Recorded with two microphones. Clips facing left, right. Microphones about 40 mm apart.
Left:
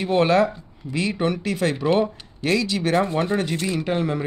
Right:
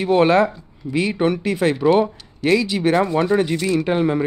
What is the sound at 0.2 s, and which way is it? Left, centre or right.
Speech, centre.